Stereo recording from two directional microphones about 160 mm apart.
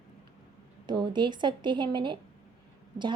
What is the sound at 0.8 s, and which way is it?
A woman's voice, 30° right (ahead or behind).